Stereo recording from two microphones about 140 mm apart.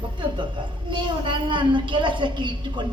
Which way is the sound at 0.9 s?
35° right (ahead or behind).